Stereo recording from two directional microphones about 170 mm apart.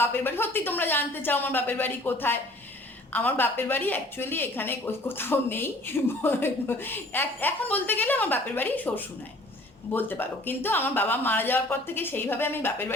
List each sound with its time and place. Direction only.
0.0 s speech: 15° left (ahead or behind)